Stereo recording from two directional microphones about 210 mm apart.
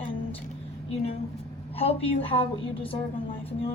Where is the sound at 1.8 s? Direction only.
25° left (ahead or behind).